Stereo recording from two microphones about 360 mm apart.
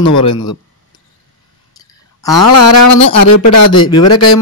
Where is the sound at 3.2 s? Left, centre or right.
Left.